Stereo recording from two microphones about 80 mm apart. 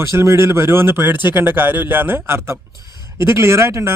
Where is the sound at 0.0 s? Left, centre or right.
Right.